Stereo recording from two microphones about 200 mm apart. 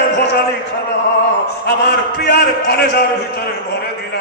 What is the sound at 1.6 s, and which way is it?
Speech, 55° left (ahead or behind).